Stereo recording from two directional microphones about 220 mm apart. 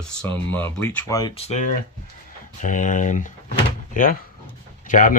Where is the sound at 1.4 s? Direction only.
30° left (ahead or behind).